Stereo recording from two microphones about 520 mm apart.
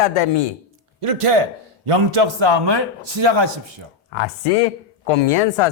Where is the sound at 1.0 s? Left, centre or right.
Right.